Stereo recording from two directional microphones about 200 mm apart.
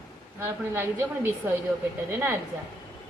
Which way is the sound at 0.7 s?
10° right (ahead or behind).